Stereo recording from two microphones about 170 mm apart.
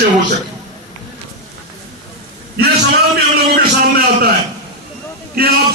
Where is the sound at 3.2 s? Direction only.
65° right (ahead or behind).